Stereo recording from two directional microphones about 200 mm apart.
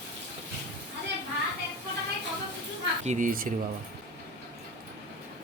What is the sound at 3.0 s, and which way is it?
Speech, 40° right (ahead or behind).